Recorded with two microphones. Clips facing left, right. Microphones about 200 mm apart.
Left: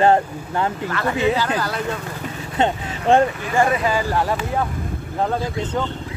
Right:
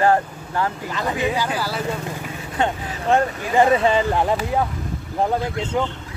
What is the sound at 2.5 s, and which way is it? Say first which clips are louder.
Speech: left 2 dB; 25° left (ahead or behind).